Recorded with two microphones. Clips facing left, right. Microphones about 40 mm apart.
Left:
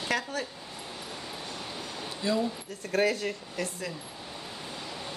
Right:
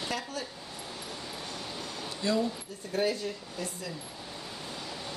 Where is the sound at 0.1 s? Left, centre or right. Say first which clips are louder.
Left 8 dB; left.